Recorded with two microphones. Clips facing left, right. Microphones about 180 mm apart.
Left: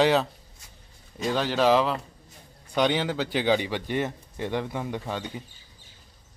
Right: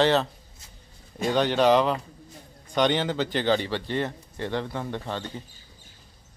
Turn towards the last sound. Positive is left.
turn(degrees=10)  # may be behind; listen again after turning